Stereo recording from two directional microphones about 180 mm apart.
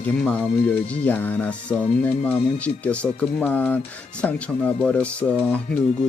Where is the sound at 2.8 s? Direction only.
5° left (ahead or behind).